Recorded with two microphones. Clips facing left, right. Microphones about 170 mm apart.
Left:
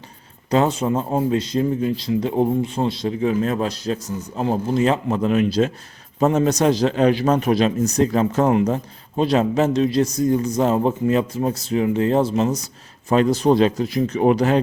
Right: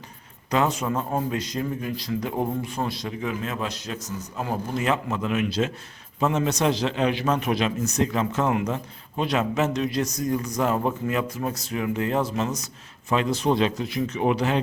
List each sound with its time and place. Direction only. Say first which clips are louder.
0.5 s a man's voice: left 5 dB; 30° left (ahead or behind)